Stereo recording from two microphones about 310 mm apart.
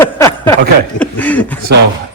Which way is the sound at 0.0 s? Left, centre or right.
Centre.